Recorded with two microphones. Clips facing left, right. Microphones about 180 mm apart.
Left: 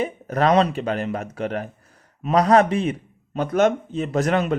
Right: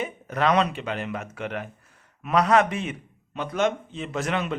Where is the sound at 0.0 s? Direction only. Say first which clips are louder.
Left 4 dB; 40° left (ahead or behind).